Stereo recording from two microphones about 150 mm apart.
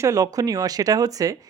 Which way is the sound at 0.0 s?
20° right (ahead or behind).